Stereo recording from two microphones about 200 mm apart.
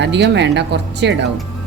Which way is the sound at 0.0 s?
60° right (ahead or behind).